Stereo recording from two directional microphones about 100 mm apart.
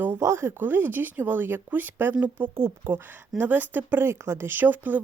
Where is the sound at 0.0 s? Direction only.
25° right (ahead or behind).